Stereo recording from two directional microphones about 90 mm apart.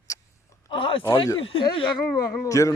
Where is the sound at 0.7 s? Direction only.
80° left.